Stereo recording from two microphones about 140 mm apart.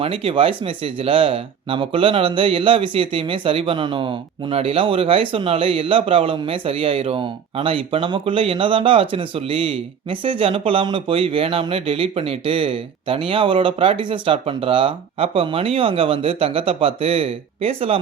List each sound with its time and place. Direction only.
0.0 s speech: 40° right (ahead or behind)